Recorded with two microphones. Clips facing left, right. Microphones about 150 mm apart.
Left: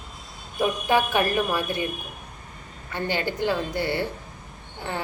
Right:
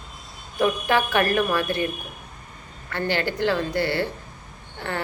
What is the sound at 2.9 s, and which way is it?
A woman's voice, 15° left (ahead or behind).